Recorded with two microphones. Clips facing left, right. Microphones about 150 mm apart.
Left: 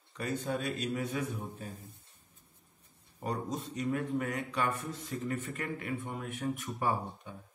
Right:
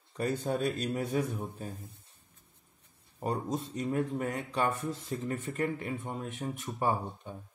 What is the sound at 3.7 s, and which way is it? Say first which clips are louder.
Speech: even; 35° right (ahead or behind).